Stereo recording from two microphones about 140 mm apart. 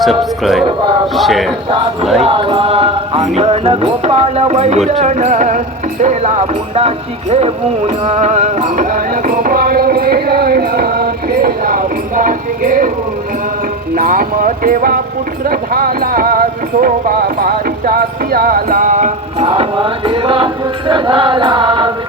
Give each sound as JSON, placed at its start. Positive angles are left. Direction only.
{"t": 0.0, "sound": "speech", "side_deg": 0}
{"t": 2.2, "sound": "speech", "side_deg": -40}
{"t": 4.9, "sound": "music", "side_deg": -55}
{"t": 13.9, "sound": "speech", "side_deg": -80}